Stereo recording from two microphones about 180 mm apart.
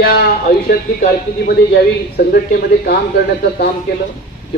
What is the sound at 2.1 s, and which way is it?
Speech, 55° left (ahead or behind).